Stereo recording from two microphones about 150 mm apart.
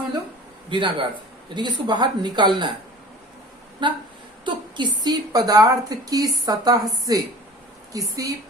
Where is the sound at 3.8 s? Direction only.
30° right (ahead or behind).